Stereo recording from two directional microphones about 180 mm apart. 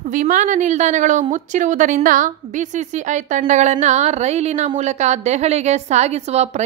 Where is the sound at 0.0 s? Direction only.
45° right (ahead or behind).